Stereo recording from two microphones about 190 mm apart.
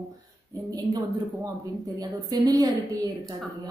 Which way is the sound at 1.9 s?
20° right (ahead or behind).